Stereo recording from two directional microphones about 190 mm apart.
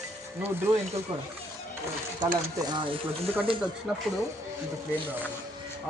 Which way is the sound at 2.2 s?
20° right (ahead or behind).